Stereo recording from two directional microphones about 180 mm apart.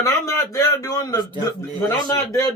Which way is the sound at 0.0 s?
15° left (ahead or behind).